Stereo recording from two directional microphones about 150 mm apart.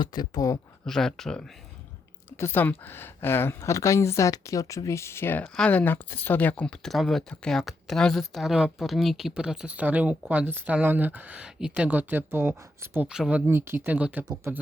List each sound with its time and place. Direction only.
0.0 s speech: 30° left (ahead or behind)
0.9 s speech: 5° left (ahead or behind)
2.3 s speech: 15° left (ahead or behind); by 14.6 s 15° right (ahead or behind)